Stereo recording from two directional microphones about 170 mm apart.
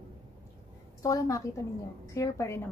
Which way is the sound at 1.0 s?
20° left (ahead or behind).